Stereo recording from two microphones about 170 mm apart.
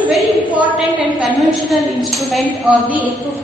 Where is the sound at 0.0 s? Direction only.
10° right (ahead or behind).